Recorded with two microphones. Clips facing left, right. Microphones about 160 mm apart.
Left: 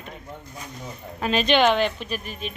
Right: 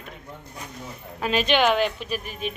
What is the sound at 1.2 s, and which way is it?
Speech, 5° right (ahead or behind).